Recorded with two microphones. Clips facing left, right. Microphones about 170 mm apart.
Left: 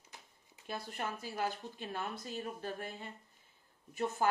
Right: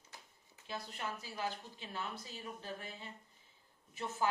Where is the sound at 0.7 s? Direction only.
55° left (ahead or behind).